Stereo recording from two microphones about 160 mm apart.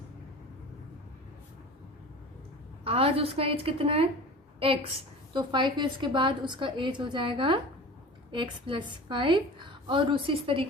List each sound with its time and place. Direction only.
2.8 s a woman's voice: 35° right (ahead or behind)
5.3 s a woman's voice: 30° right (ahead or behind)